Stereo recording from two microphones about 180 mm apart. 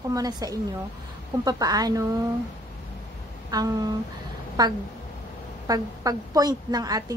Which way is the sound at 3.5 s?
20° right (ahead or behind).